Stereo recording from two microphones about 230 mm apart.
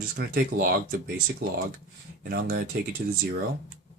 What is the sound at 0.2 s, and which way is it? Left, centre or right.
Speech, right.